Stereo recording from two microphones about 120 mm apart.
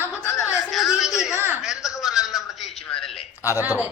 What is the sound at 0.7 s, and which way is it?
A woman's voice, centre (ahead or behind).